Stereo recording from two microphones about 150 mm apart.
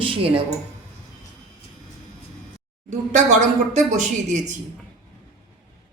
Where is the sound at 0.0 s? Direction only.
35° right (ahead or behind).